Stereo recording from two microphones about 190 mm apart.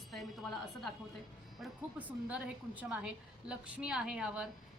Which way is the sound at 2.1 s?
5° right (ahead or behind).